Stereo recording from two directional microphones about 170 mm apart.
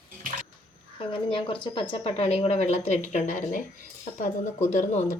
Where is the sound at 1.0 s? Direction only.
30° left (ahead or behind); by 3.6 s 50° left (ahead or behind).